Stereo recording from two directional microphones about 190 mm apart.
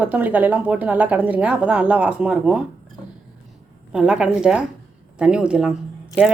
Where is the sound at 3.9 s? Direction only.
5° right (ahead or behind).